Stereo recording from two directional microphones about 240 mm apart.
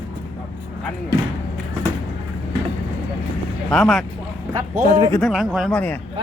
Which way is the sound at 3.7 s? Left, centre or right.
Centre.